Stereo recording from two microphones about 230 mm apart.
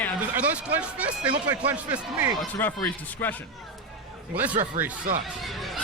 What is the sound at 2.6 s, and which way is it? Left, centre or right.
Speech, centre.